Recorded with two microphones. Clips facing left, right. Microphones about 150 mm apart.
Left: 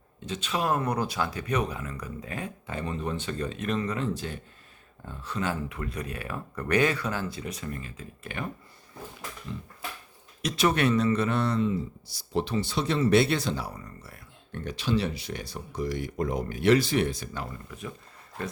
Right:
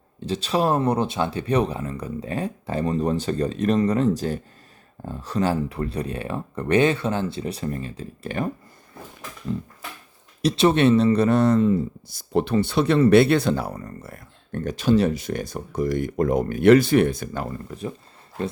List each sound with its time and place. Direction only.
0.2 s speech: 35° right (ahead or behind)
10.4 s speech: 25° right (ahead or behind); by 17.7 s 50° right (ahead or behind)